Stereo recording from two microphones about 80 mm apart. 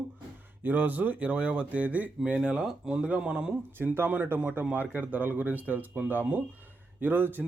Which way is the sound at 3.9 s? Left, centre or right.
Right.